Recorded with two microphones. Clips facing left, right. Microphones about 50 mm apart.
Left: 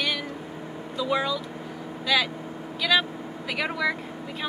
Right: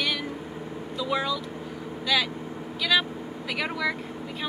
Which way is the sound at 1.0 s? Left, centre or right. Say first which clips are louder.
Left 2 dB; centre.